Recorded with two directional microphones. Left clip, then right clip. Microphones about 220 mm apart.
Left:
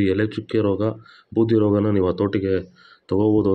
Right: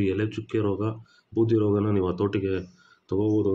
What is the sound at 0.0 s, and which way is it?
Speech, 20° left (ahead or behind).